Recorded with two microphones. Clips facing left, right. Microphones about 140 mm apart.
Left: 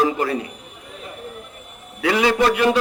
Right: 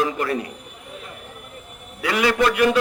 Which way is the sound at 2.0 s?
25° left (ahead or behind).